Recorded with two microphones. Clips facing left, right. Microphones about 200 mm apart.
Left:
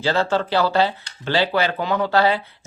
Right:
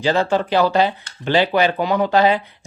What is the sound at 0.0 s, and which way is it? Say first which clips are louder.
Speech: right 2 dB; 15° right (ahead or behind).